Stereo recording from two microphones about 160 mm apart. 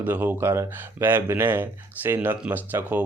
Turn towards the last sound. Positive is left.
turn(degrees=-10)  # may be behind; listen again after turning